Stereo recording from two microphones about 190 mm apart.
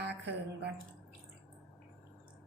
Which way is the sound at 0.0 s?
60° right (ahead or behind).